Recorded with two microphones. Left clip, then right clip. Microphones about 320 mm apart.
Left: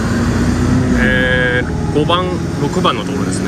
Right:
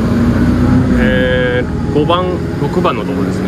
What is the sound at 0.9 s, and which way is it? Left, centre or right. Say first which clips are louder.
Vehicle: left 1 dB; centre.